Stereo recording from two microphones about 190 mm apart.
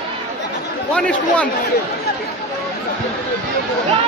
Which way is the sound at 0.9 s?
5° left (ahead or behind).